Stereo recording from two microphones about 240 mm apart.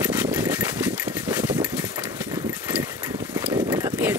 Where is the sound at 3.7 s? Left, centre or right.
Centre.